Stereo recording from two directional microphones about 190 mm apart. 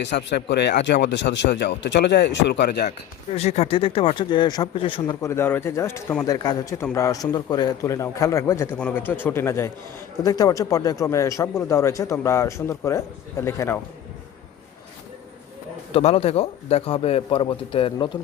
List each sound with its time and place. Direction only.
0.0 s speech: 65° left (ahead or behind)
3.3 s a man's voice: 35° left (ahead or behind); by 13.7 s 15° left (ahead or behind)
15.9 s a man's voice: 30° left (ahead or behind)